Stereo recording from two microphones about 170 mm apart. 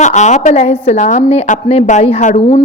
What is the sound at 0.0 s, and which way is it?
A woman's voice, 45° left (ahead or behind).